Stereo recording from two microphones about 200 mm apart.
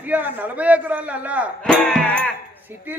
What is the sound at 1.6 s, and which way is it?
Speech, 5° left (ahead or behind).